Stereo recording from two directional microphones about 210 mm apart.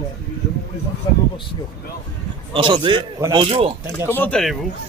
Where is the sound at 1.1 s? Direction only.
20° left (ahead or behind).